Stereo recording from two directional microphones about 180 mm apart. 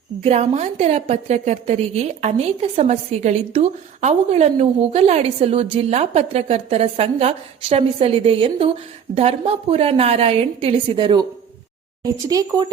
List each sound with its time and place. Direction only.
0.3 s a woman's voice: 35° right (ahead or behind)
12.3 s speech: 20° right (ahead or behind)